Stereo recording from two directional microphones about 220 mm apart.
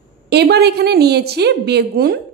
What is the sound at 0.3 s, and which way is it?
A woman's voice, 45° right (ahead or behind).